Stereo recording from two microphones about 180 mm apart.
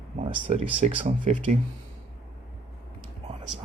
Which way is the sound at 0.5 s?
35° right (ahead or behind).